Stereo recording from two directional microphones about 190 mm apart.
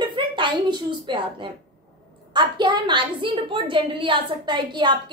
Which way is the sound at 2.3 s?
25° right (ahead or behind).